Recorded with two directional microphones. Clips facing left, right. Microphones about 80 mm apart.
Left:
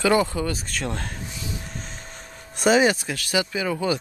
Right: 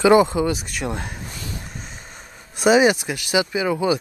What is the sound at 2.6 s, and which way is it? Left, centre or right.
Speech, centre.